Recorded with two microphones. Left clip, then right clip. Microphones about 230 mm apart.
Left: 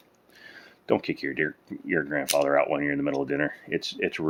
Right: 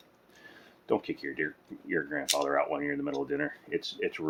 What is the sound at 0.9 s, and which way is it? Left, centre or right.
Speech, left.